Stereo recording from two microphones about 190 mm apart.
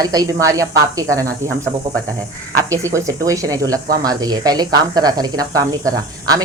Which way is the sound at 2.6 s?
15° right (ahead or behind).